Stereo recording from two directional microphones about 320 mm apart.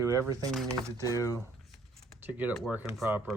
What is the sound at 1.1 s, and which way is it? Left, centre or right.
Speech, centre.